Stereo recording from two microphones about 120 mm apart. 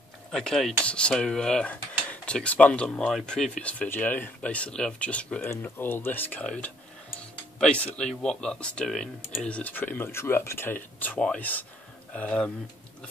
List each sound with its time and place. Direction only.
0.3 s speech: 5° left (ahead or behind)